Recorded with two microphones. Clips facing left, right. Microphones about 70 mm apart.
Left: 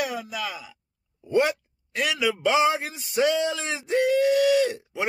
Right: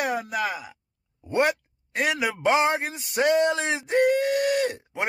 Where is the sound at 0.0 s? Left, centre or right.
Right.